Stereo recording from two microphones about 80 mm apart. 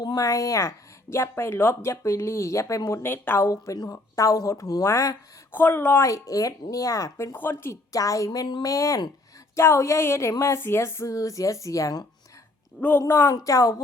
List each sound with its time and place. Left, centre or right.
0.0 s a woman's voice: left
3.8 s speech: left
5.5 s speech: left
6.0 s speech: left
7.3 s speech: left
7.7 s a woman's voice: left
13.1 s speech: left
13.3 s speech: left